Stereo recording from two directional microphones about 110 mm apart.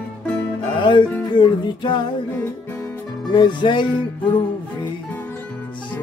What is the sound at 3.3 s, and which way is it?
Music, 45° left (ahead or behind).